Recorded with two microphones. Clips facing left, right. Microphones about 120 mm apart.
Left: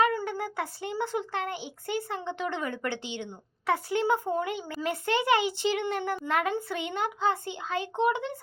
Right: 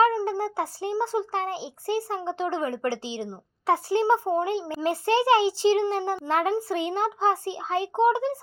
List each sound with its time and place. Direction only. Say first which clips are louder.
0.0 s a child's voice: right 5 dB; 35° right (ahead or behind)